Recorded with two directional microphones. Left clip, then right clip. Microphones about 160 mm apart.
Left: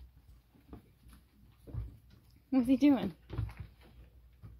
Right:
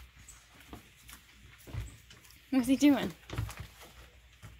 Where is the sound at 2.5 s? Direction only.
10° left (ahead or behind).